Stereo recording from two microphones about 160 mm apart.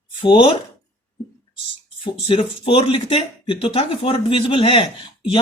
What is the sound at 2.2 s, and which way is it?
Speech, 35° left (ahead or behind).